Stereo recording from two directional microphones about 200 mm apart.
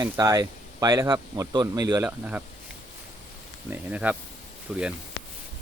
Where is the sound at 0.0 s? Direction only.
15° right (ahead or behind).